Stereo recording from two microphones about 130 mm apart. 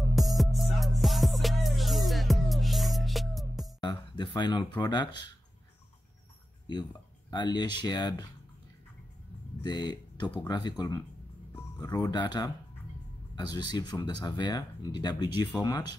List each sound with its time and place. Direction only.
0.0 s music: centre (ahead or behind)
3.8 s speech: 35° left (ahead or behind)
6.7 s speech: 35° left (ahead or behind)
9.6 s speech: 35° left (ahead or behind)
12.1 s speech: 35° left (ahead or behind)